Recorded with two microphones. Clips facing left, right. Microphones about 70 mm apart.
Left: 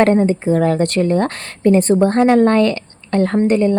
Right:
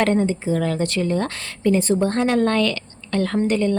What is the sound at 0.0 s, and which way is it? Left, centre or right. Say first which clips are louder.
Speech: left 6 dB; left.